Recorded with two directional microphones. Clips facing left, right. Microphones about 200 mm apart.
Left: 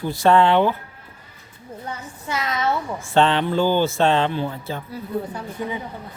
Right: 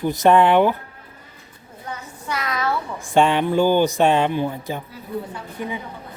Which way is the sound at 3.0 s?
15° right (ahead or behind).